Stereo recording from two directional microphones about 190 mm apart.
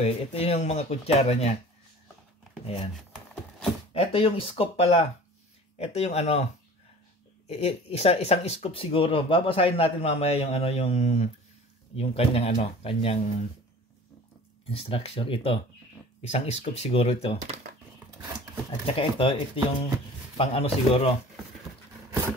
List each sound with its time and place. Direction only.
0.0 s speech: 30° left (ahead or behind)
2.6 s speech: 30° left (ahead or behind)
3.9 s speech: 30° left (ahead or behind)
14.7 s speech: 30° left (ahead or behind)
18.9 s speech: 25° left (ahead or behind)